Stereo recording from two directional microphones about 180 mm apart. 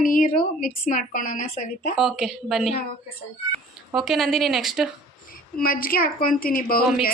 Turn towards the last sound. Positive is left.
turn(degrees=55)  # may be behind; listen again after turning